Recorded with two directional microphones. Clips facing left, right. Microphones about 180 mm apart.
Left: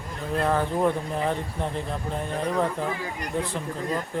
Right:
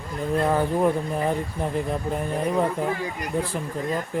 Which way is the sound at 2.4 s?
10° right (ahead or behind).